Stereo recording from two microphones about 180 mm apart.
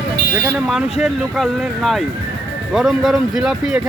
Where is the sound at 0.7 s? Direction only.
Centre (ahead or behind).